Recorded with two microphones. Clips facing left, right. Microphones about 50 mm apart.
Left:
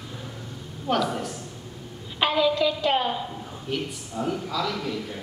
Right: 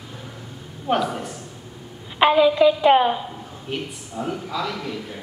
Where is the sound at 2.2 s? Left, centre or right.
Centre.